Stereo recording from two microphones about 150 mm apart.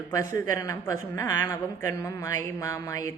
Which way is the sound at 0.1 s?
20° left (ahead or behind).